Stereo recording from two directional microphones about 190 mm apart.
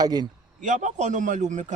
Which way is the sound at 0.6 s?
40° right (ahead or behind).